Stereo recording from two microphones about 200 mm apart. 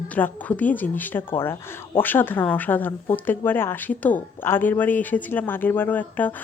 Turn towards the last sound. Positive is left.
turn(degrees=10)  # may be behind; listen again after turning